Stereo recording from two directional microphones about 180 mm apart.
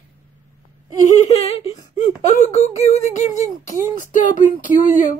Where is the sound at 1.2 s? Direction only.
35° left (ahead or behind).